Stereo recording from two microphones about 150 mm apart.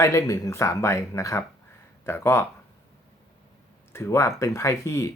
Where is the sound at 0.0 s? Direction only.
20° left (ahead or behind).